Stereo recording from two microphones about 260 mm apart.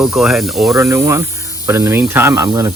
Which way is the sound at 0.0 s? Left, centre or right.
Centre.